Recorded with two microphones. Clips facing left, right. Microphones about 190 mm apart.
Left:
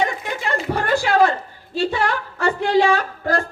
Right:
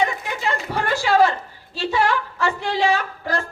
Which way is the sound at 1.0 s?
55° left (ahead or behind).